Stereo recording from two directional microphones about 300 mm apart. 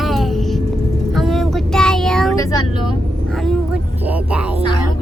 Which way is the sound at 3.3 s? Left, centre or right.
Centre.